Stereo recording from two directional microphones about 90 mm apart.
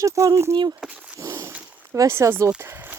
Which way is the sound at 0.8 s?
10° right (ahead or behind).